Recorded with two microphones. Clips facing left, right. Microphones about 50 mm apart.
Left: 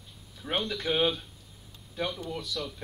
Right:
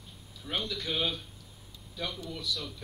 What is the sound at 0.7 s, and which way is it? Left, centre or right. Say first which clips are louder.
Speech: left 7 dB; left.